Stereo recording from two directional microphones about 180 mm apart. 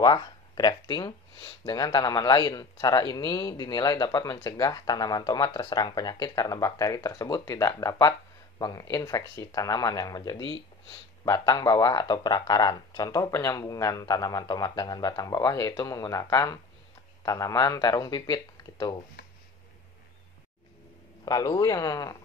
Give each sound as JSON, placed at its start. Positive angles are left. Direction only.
{"t": 0.0, "sound": "speech", "side_deg": 25}
{"t": 21.3, "sound": "speech", "side_deg": 20}